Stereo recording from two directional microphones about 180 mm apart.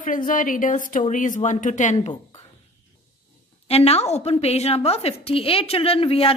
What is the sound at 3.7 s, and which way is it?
A woman's voice, 35° left (ahead or behind).